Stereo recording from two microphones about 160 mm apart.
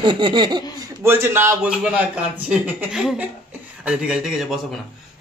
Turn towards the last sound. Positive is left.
turn(degrees=0)  # may be behind; listen again after turning